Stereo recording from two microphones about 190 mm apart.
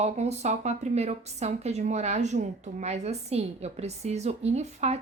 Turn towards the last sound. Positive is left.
turn(degrees=-35)  # may be behind; listen again after turning